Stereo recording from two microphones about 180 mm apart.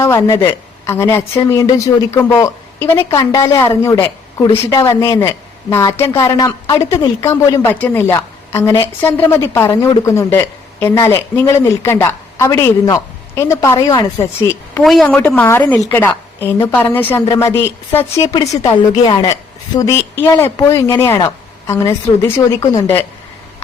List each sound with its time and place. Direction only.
0.0 s a woman's voice: 15° left (ahead or behind)
14.8 s a woman's voice: 5° left (ahead or behind)